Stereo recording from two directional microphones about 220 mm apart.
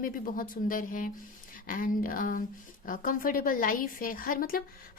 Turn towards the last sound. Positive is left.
turn(degrees=40)  # may be behind; listen again after turning